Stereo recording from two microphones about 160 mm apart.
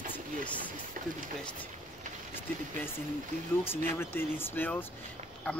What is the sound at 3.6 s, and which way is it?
Speech, 15° left (ahead or behind).